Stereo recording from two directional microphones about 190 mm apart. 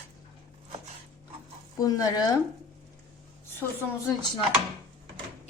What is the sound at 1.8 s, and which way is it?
Speech, 20° left (ahead or behind).